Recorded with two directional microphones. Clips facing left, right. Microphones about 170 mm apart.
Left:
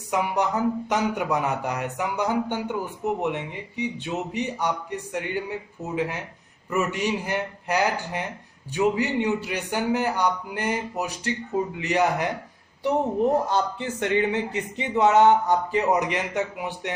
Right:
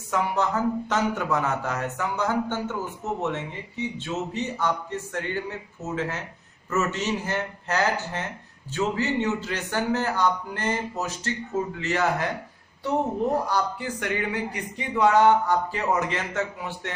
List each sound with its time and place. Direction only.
0.1 s speech: 15° left (ahead or behind)
13.5 s speech: 25° left (ahead or behind)